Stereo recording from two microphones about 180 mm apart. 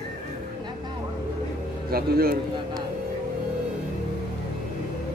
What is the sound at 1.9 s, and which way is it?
Speech, 55° right (ahead or behind).